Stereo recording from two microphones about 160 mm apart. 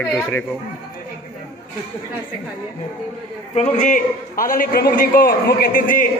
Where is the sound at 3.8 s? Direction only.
55° left (ahead or behind).